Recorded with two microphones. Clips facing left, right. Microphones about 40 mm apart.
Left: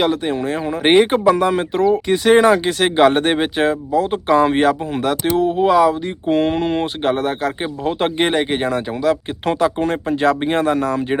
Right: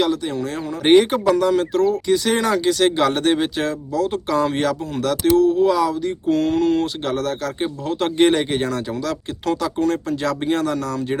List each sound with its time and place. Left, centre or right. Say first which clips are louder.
0.0 s speech: left 3 dB; left